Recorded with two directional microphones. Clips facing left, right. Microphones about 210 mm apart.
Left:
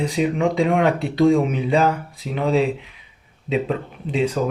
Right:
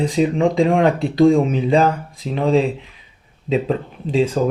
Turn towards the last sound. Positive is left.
turn(degrees=-35)  # may be behind; listen again after turning